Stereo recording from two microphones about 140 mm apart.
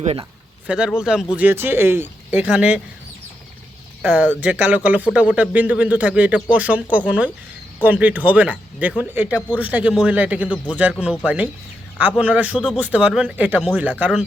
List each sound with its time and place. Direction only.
0.0 s speech: 45° right (ahead or behind)
0.7 s speech: 5° right (ahead or behind)
4.0 s speech: 10° right (ahead or behind)